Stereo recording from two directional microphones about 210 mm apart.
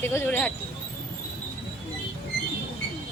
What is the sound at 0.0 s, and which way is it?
Speech, 10° left (ahead or behind).